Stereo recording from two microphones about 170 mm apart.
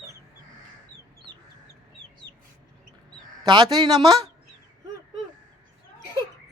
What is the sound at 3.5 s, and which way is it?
Speech, 25° right (ahead or behind).